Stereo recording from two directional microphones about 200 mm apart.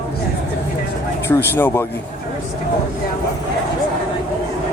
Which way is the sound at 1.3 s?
10° left (ahead or behind).